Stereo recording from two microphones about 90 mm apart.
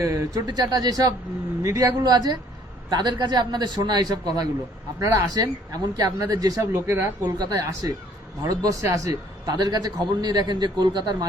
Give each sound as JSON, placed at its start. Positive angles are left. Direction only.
{"t": 0.0, "sound": "a man's voice", "side_deg": -40}
{"t": 7.3, "sound": "a man's voice", "side_deg": -50}